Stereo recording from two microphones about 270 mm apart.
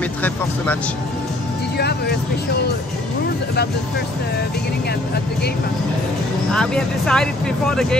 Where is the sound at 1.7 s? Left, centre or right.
Left.